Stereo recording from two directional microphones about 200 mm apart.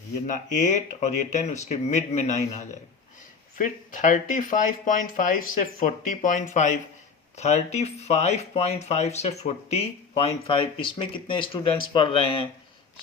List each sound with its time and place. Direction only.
0.3 s speech: 40° left (ahead or behind)